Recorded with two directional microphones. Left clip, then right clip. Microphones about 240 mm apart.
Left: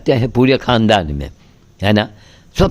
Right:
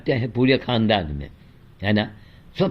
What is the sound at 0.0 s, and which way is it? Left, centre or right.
A man's voice, left.